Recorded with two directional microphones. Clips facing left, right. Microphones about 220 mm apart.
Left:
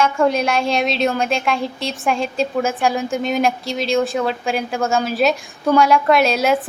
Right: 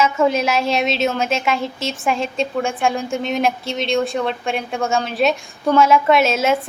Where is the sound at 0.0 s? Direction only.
5° right (ahead or behind).